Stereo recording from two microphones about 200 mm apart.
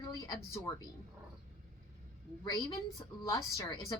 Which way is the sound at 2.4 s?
20° left (ahead or behind).